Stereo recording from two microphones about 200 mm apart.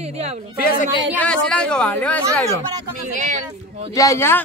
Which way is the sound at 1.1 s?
5° left (ahead or behind).